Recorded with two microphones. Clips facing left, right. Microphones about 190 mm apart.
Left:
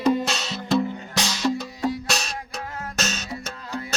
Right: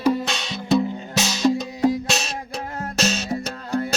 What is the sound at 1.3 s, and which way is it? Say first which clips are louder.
Music: right 5 dB; 15° right (ahead or behind).